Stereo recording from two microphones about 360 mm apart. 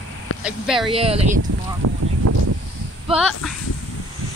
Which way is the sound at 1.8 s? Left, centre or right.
Right.